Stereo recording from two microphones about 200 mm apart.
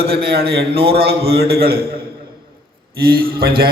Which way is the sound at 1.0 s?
50° right (ahead or behind).